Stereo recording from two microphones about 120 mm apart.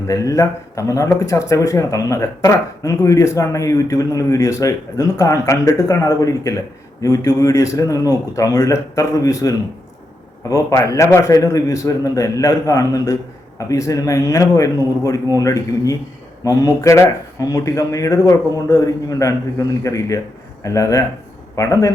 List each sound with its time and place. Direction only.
0.1 s speech: 30° left (ahead or behind)